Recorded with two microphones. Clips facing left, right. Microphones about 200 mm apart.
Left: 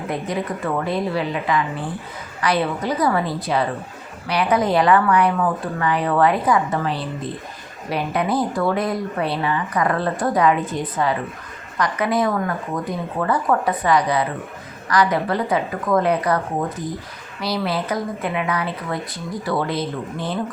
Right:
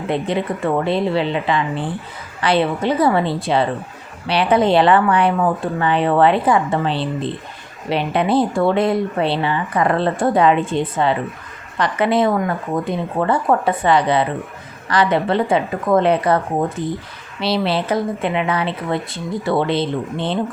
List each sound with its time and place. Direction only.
0.1 s speech: 25° right (ahead or behind)